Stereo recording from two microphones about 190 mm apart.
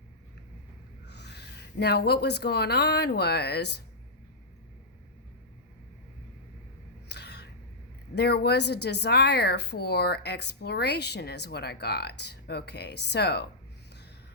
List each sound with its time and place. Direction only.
1.0 s a woman's voice: 60° left (ahead or behind)
7.1 s a sound: 60° left (ahead or behind)
8.1 s speech: 60° left (ahead or behind)